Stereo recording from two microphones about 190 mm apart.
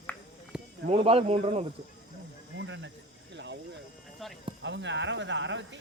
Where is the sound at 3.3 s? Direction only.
65° right (ahead or behind).